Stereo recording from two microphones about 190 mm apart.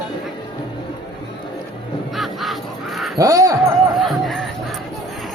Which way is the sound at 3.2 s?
15° right (ahead or behind).